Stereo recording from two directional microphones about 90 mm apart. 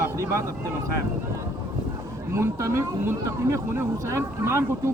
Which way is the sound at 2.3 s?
35° right (ahead or behind).